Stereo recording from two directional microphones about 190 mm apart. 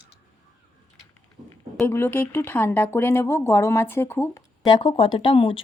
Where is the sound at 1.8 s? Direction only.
15° left (ahead or behind).